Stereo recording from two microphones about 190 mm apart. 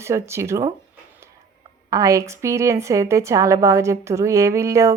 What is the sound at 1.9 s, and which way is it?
Speech, 15° right (ahead or behind).